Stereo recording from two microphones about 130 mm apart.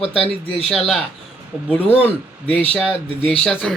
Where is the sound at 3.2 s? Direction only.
5° left (ahead or behind).